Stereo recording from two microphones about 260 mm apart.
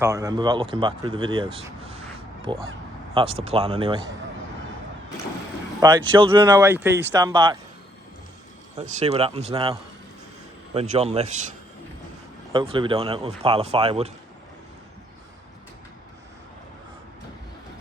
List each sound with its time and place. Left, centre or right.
0.0 s speech: centre
5.8 s speech: centre
9.0 s speech: right
10.8 s speech: right
12.5 s speech: centre